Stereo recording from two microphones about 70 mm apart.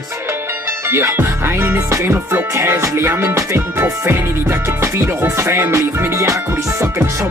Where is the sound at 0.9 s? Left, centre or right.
Right.